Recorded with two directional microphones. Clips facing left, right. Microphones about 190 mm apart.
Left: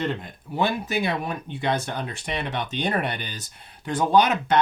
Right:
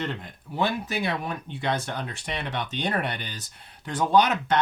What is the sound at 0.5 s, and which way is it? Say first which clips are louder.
Speech: left 2 dB; 10° left (ahead or behind).